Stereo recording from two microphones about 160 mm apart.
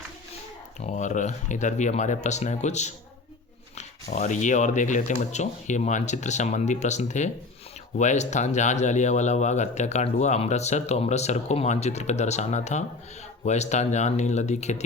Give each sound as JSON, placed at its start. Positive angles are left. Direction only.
{"t": 0.9, "sound": "speech", "side_deg": 50}